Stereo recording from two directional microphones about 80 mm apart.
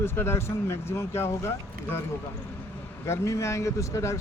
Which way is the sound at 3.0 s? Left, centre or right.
Left.